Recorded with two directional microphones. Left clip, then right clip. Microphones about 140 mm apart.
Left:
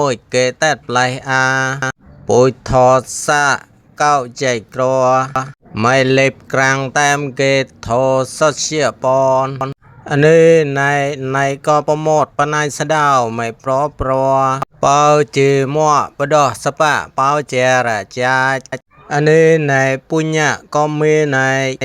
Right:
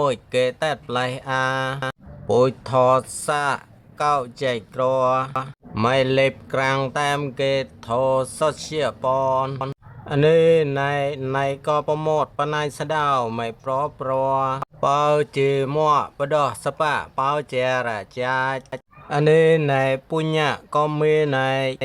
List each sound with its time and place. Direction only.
0.0 s speech: 30° left (ahead or behind)
11.9 s speech: 10° left (ahead or behind)
12.2 s speech: 35° left (ahead or behind)
19.0 s speech: 20° left (ahead or behind)